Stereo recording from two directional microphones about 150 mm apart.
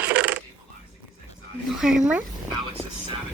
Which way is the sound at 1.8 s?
5° right (ahead or behind).